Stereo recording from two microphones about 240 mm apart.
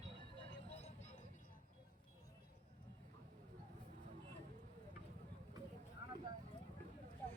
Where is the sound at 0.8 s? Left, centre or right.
Left.